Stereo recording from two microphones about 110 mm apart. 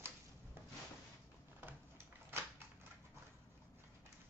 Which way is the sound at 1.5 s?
20° right (ahead or behind).